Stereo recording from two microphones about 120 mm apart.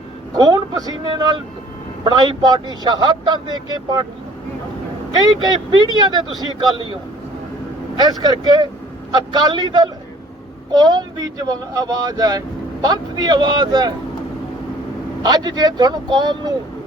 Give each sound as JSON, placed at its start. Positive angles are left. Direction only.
{"t": 0.3, "sound": "speech", "side_deg": -35}
{"t": 5.1, "sound": "speech", "side_deg": -35}
{"t": 7.9, "sound": "speech", "side_deg": -35}
{"t": 15.2, "sound": "speech", "side_deg": -35}